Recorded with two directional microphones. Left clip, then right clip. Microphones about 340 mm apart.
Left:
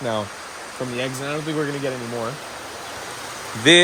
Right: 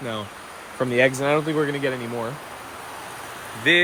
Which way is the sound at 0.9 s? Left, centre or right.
Right.